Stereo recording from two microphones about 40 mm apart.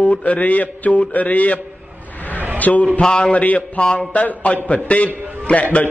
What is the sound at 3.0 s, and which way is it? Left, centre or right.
Speech, centre.